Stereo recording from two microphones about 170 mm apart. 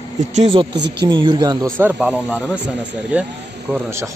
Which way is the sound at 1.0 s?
30° right (ahead or behind).